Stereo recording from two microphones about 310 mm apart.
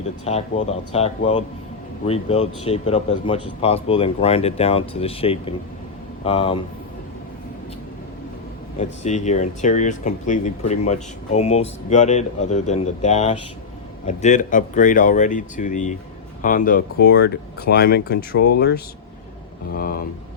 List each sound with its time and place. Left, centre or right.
0.3 s speech: left
9.0 s speech: left
19.7 s speech: left